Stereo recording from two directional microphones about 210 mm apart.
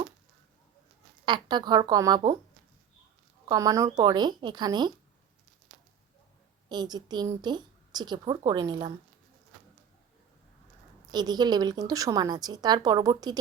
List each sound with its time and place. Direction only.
1.2 s a woman's voice: 20° right (ahead or behind)
3.5 s a woman's voice: 15° right (ahead or behind)
6.7 s a woman's voice: 20° right (ahead or behind)
11.1 s a woman's voice: 20° right (ahead or behind)